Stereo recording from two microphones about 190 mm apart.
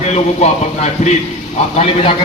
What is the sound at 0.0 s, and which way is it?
A man's voice, 35° left (ahead or behind).